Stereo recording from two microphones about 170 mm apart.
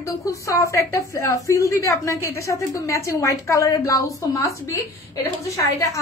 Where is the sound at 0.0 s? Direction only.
20° left (ahead or behind).